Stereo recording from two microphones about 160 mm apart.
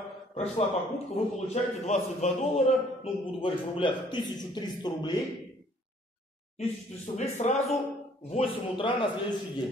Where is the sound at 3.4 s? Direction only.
30° left (ahead or behind).